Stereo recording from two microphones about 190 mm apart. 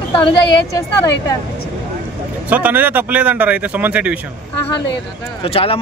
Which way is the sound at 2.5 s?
10° right (ahead or behind).